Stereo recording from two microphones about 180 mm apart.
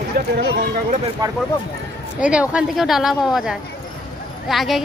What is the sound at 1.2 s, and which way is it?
Speech, 20° right (ahead or behind).